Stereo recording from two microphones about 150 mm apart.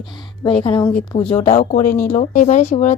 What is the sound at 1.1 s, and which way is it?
Speech, 40° left (ahead or behind).